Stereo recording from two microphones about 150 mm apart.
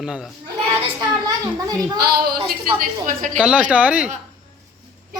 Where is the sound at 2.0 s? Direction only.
85° right; by 3.3 s 60° right (ahead or behind).